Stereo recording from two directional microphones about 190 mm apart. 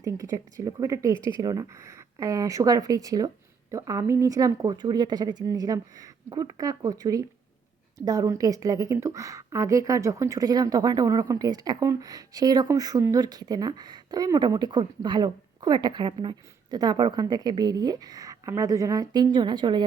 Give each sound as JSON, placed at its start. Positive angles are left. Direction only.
{"t": 0.0, "sound": "a woman's voice", "side_deg": -15}